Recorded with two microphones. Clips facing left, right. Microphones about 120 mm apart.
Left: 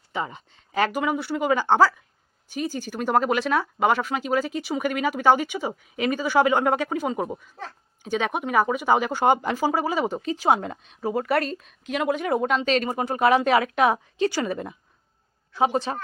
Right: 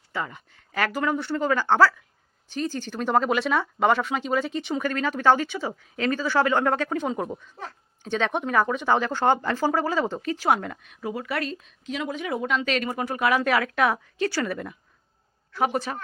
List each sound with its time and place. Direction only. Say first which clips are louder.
0.1 s speech: left 2 dB; 20° left (ahead or behind)
11.1 s a woman's voice: left 6 dB; 45° left (ahead or behind); by 12.2 s 60° left (ahead or behind)
12.2 s a woman's voice: left 4 dB; 45° left (ahead or behind)
12.6 s speech: left 3 dB; 30° left (ahead or behind)